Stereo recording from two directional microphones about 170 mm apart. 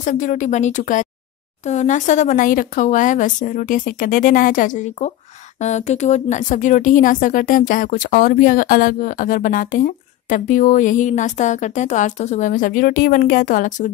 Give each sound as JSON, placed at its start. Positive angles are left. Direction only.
{"t": 0.0, "sound": "a woman's voice", "side_deg": 50}